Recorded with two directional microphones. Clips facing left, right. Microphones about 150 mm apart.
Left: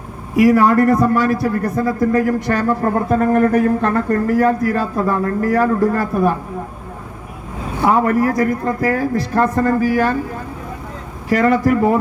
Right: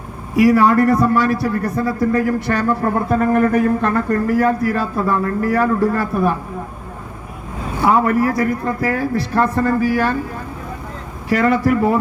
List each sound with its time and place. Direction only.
0.3 s a man's voice: 45° left (ahead or behind)
7.9 s a man's voice: 45° left (ahead or behind)
11.3 s a man's voice: 45° left (ahead or behind)